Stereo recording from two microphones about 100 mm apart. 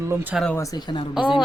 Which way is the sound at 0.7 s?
50° left (ahead or behind).